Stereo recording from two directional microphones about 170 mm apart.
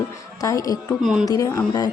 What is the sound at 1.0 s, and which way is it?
Speech, 5° right (ahead or behind).